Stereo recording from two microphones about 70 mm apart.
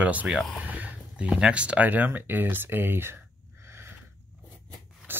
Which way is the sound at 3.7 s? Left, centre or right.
Right.